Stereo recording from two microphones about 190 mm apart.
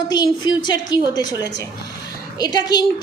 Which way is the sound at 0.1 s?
20° left (ahead or behind).